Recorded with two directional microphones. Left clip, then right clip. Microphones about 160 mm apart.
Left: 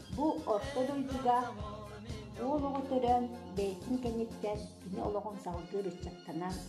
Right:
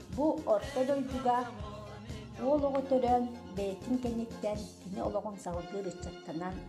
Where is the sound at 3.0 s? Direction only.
35° right (ahead or behind).